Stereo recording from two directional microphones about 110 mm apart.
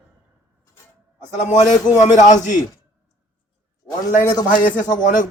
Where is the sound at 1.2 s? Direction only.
90° left.